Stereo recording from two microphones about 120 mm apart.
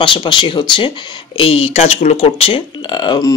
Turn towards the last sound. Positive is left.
turn(degrees=35)  # may be behind; listen again after turning